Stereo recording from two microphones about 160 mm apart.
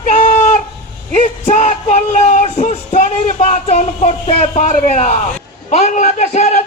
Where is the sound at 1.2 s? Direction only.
45° left (ahead or behind).